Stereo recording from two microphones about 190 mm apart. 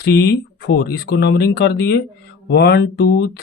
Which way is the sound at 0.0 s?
60° left (ahead or behind).